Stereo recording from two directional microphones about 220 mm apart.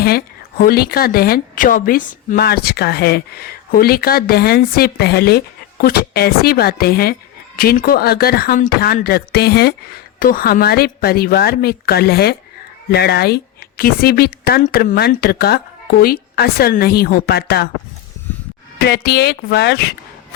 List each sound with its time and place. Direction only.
0.0 s a woman's voice: 45° left (ahead or behind)
18.8 s a woman's voice: 45° left (ahead or behind)